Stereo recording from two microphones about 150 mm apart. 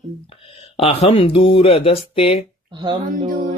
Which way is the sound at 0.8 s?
40° left (ahead or behind).